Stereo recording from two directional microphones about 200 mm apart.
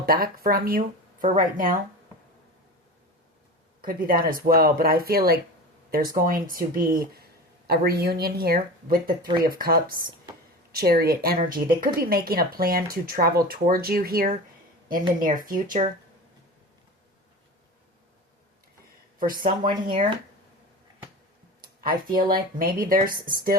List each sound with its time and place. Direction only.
0.0 s a woman's voice: 50° right (ahead or behind)
3.8 s a woman's voice: 45° right (ahead or behind)
19.2 s a woman's voice: 45° right (ahead or behind)
21.6 s a woman's voice: 45° right (ahead or behind)